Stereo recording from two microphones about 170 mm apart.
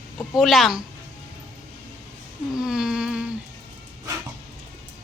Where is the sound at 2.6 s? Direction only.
5° right (ahead or behind).